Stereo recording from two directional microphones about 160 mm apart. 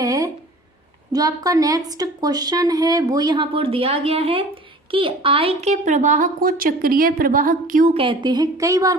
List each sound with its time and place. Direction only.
0.0 s a sound: 20° right (ahead or behind)
1.1 s a woman's voice: 25° right (ahead or behind); by 7.9 s 60° right (ahead or behind)
7.9 s a woman's voice: 30° right (ahead or behind)